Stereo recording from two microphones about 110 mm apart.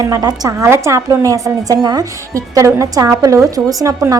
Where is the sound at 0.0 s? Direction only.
35° right (ahead or behind).